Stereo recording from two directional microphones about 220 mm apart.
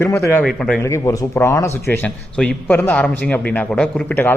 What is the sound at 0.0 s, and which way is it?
A man's voice, 10° left (ahead or behind).